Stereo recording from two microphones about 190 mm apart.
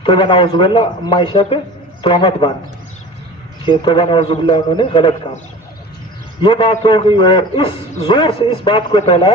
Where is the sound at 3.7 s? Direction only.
25° left (ahead or behind).